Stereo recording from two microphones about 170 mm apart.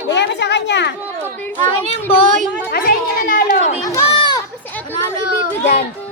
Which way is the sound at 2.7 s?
55° left (ahead or behind).